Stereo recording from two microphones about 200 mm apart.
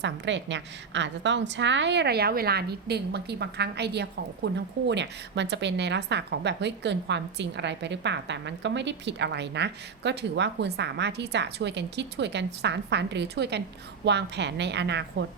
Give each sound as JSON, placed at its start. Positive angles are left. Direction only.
{"t": 0.0, "sound": "a woman's voice", "side_deg": -65}